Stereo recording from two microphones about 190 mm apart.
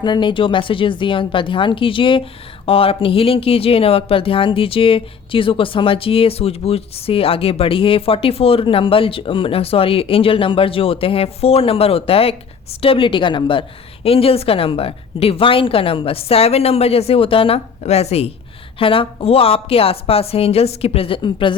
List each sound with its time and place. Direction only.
0.0 s a woman's voice: 25° left (ahead or behind)